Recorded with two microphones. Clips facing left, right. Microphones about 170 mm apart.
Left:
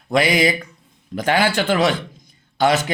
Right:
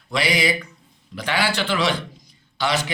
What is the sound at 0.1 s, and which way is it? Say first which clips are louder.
A man's voice: left 5 dB; 50° left (ahead or behind).